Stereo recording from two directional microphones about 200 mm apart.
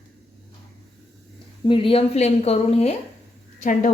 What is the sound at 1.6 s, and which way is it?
A woman's voice, 25° left (ahead or behind).